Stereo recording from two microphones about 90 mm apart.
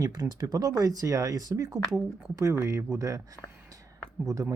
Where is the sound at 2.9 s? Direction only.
35° right (ahead or behind).